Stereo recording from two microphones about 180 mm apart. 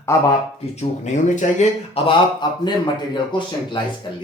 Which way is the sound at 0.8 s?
40° left (ahead or behind).